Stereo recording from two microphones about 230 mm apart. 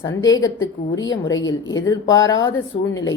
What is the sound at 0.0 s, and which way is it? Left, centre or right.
A woman's voice, centre.